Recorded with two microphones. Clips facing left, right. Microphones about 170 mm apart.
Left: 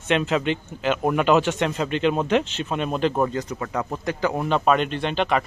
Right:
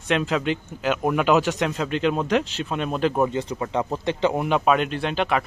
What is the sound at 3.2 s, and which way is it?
A man's voice, 25° right (ahead or behind).